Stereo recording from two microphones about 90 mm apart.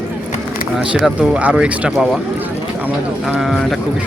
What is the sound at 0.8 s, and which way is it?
Speech, 5° right (ahead or behind).